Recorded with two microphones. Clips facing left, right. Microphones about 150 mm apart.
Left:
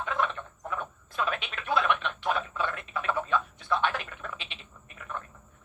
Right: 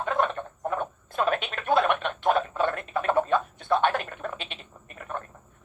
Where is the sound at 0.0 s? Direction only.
50° right (ahead or behind).